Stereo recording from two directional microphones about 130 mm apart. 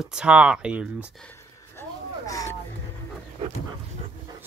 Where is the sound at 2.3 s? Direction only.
25° left (ahead or behind).